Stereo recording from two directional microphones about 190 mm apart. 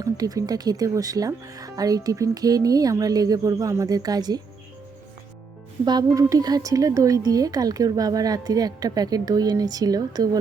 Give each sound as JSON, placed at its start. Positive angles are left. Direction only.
{"t": 0.0, "sound": "a woman's voice", "side_deg": -20}
{"t": 5.8, "sound": "a woman's voice", "side_deg": -20}